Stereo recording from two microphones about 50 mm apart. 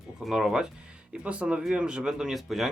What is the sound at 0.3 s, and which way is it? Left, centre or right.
Speech, centre.